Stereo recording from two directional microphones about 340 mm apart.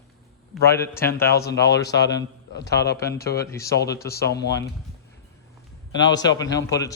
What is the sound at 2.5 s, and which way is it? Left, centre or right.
Speech, left.